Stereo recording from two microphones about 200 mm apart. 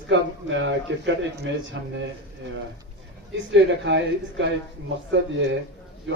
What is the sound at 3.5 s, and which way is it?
A man's voice, 65° right (ahead or behind).